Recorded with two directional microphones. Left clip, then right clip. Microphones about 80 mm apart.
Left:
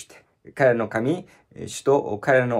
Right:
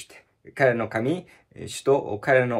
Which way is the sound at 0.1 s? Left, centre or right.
Left.